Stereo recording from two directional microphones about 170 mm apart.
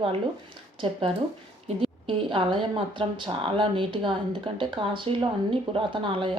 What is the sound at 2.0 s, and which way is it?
Speech, 30° right (ahead or behind).